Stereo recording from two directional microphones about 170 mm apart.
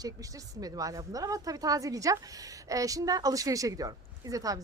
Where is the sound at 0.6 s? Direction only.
20° right (ahead or behind).